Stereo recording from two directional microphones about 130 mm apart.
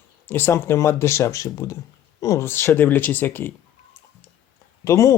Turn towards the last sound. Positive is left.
turn(degrees=25)  # may be behind; listen again after turning